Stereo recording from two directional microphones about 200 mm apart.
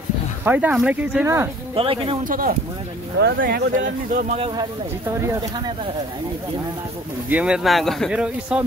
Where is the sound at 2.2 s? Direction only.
45° right (ahead or behind).